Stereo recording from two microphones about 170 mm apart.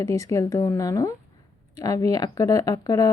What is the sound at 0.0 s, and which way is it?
Speech, 20° left (ahead or behind).